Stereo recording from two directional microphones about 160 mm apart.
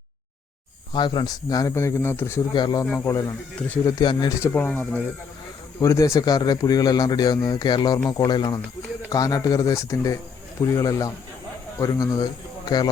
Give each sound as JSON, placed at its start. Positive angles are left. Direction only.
{"t": 0.9, "sound": "speech", "side_deg": 30}
{"t": 2.5, "sound": "speech", "side_deg": 25}
{"t": 4.4, "sound": "speech", "side_deg": 10}
{"t": 5.8, "sound": "a man's voice", "side_deg": 20}